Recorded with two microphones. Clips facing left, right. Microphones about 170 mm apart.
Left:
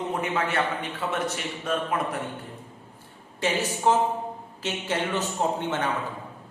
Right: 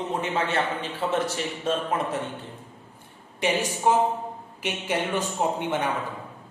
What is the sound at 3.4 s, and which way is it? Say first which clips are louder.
Speech: right 1 dB; 15° right (ahead or behind).